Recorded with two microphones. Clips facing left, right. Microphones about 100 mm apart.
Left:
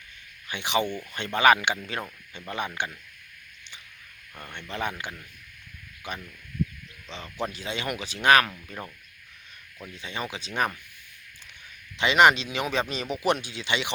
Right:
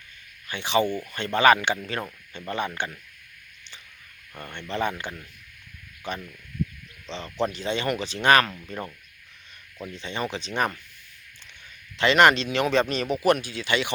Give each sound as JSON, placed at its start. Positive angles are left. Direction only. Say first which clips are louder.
{"t": 0.4, "sound": "speech", "louder": "right 3 dB", "side_deg": 15}
{"t": 4.7, "sound": "speech", "louder": "right 4 dB", "side_deg": 10}
{"t": 7.1, "sound": "speech", "louder": "right 5 dB", "side_deg": 10}
{"t": 9.9, "sound": "speech", "louder": "right 4 dB", "side_deg": 10}
{"t": 11.9, "sound": "speech", "louder": "right 1 dB", "side_deg": 15}